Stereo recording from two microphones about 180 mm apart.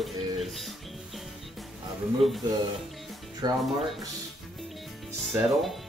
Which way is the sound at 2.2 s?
Centre (ahead or behind).